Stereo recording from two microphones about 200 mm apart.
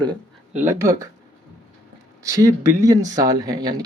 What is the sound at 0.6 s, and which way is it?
Speech, 15° right (ahead or behind).